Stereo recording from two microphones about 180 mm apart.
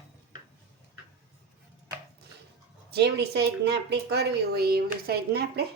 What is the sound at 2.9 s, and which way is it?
A woman's voice, 65° right (ahead or behind).